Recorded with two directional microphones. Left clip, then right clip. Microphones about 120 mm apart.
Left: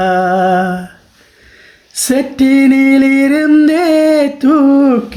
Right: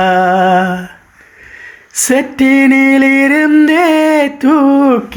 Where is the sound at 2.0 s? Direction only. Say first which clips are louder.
Right 1 dB; 25° right (ahead or behind).